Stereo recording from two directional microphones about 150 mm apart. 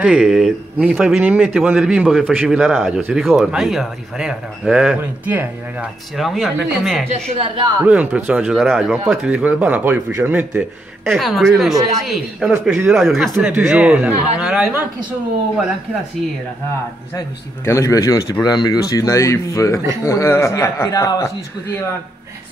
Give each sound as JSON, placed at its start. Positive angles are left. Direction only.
{"t": 0.0, "sound": "a man's voice", "side_deg": -5}
{"t": 6.1, "sound": "a man's voice", "side_deg": 0}
{"t": 7.3, "sound": "a woman's voice", "side_deg": -35}
{"t": 7.8, "sound": "speech", "side_deg": -10}
{"t": 11.1, "sound": "a man's voice", "side_deg": 0}
{"t": 17.6, "sound": "speech", "side_deg": 20}